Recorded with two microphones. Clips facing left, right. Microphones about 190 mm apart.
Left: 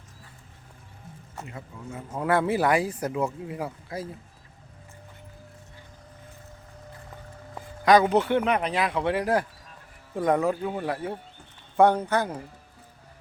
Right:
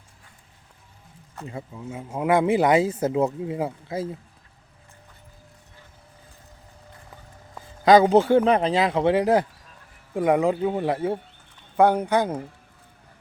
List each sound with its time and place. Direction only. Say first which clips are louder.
1.5 s speech: right 7 dB; 25° right (ahead or behind)
2.0 s speech: right 4 dB; 15° right (ahead or behind)
7.9 s speech: right 4 dB; 25° right (ahead or behind)
11.8 s speech: right 2 dB; 10° right (ahead or behind)